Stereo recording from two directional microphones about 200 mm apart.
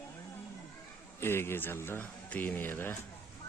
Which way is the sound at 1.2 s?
10° left (ahead or behind).